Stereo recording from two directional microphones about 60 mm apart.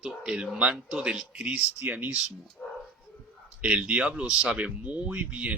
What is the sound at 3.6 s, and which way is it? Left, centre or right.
Speech, right.